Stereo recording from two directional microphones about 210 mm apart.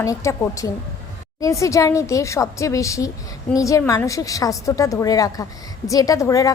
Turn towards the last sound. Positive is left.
turn(degrees=15)  # may be behind; listen again after turning